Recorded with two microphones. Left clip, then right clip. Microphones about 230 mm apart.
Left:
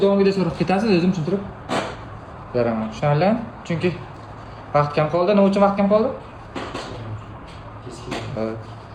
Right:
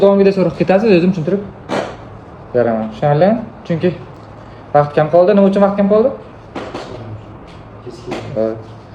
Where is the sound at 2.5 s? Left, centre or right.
Centre.